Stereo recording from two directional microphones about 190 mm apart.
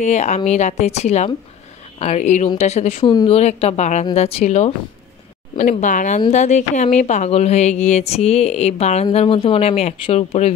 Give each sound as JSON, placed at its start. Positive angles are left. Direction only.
{"t": 0.0, "sound": "speech", "side_deg": 35}